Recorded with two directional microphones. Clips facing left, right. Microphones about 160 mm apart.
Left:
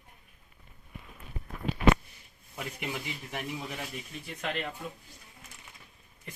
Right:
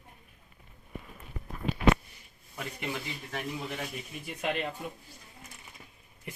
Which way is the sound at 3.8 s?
15° right (ahead or behind).